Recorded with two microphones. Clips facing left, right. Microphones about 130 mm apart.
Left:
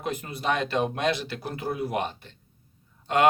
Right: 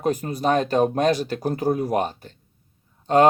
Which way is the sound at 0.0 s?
40° right (ahead or behind).